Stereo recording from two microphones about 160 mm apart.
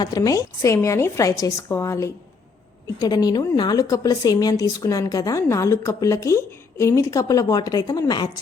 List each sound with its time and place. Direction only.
0.0 s a woman's voice: 25° left (ahead or behind)